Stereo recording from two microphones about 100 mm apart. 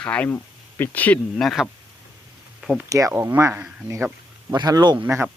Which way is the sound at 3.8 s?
25° right (ahead or behind).